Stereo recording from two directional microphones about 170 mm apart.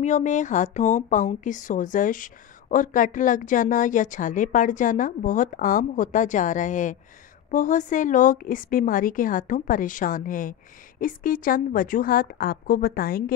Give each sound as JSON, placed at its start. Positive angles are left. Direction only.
{"t": 0.0, "sound": "a woman's voice", "side_deg": 45}